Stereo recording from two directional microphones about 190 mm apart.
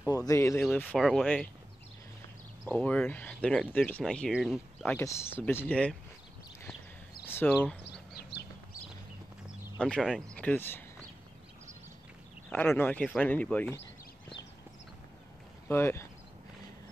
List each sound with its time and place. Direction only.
0.3 s speech: 15° left (ahead or behind)
2.7 s speech: 5° left (ahead or behind)
4.9 s speech: 10° left (ahead or behind)
7.2 s a sound: 10° left (ahead or behind)
7.9 s a sound: 60° left (ahead or behind)
9.8 s speech: 5° left (ahead or behind)
12.4 s speech: 10° left (ahead or behind)
15.7 s speech: 15° left (ahead or behind)